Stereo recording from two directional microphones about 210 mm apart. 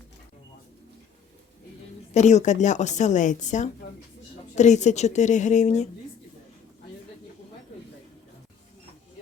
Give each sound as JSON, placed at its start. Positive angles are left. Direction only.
{"t": 2.1, "sound": "a woman's voice", "side_deg": 35}